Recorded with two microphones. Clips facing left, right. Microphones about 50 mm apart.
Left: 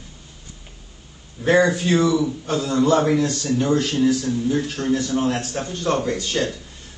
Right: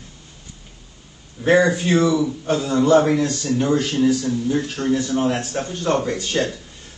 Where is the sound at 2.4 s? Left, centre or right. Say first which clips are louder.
Right 1 dB; centre.